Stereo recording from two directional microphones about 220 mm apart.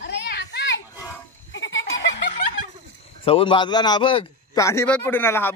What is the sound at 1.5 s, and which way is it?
Goat, 55° left (ahead or behind).